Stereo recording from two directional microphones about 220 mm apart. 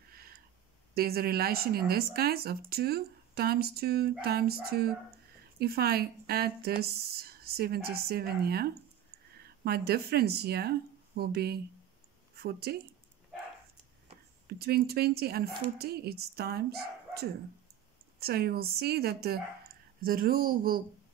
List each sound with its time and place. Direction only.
0.1 s a sound: 45° right (ahead or behind)
0.9 s speech: 45° right (ahead or behind)
14.5 s speech: 45° right (ahead or behind)